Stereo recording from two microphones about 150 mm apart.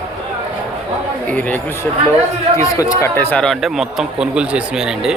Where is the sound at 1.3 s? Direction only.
10° left (ahead or behind).